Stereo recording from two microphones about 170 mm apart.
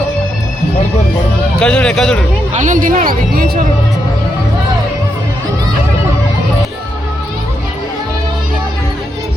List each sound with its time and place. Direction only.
1.5 s speech: 5° left (ahead or behind)
2.5 s speech: 45° right (ahead or behind); by 3.7 s 60° right (ahead or behind)